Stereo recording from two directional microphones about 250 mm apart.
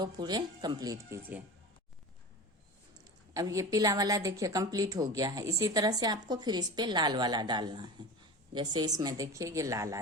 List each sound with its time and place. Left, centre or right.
0.0 s a woman's voice: centre
3.0 s a woman's voice: centre